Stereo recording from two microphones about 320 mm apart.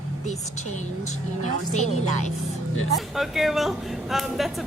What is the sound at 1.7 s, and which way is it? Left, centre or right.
Speech, left.